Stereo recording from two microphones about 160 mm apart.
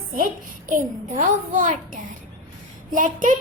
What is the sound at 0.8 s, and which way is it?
Child singing, 55° right (ahead or behind).